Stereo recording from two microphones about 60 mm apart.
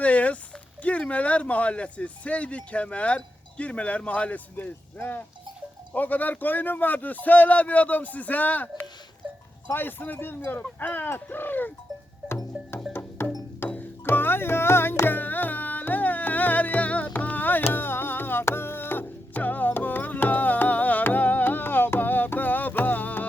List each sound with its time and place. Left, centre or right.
0.0 s a sound: left
0.8 s speech: left
12.9 s music: left